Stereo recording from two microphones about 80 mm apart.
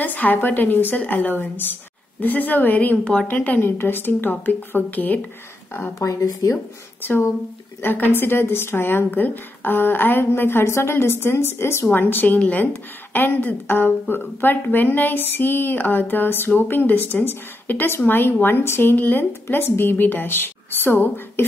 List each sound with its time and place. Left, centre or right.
0.0 s a woman's voice: left
5.9 s a woman's voice: left
7.0 s a woman's voice: left